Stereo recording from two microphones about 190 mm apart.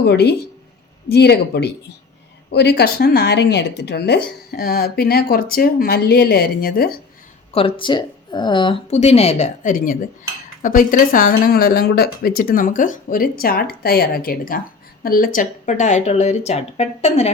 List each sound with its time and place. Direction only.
0.0 s speech: 60° left (ahead or behind)
7.5 s speech: 30° left (ahead or behind)